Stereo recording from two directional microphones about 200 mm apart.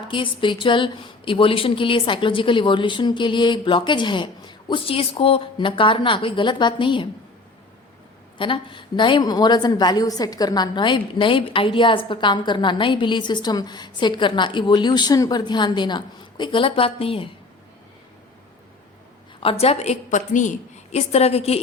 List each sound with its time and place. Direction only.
0.1 s a woman's voice: 25° left (ahead or behind)
8.4 s a woman's voice: 25° left (ahead or behind)
19.4 s a woman's voice: 30° left (ahead or behind)